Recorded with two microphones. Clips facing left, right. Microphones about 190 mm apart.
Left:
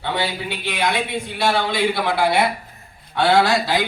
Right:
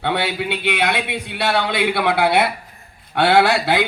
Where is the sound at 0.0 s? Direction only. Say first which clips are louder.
Right 3 dB; 65° right (ahead or behind).